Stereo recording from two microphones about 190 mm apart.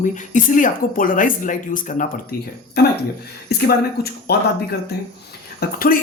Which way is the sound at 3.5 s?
55° left (ahead or behind).